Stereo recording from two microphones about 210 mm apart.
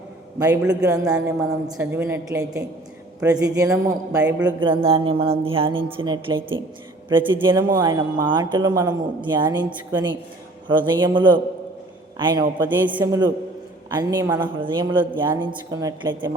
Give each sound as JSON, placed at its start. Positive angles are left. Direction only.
{"t": 0.4, "sound": "a woman's voice", "side_deg": -10}
{"t": 1.1, "sound": "a sound", "side_deg": 0}
{"t": 1.7, "sound": "a woman's voice", "side_deg": -10}
{"t": 4.4, "sound": "a man's voice", "side_deg": -25}
{"t": 12.6, "sound": "a woman's voice", "side_deg": -10}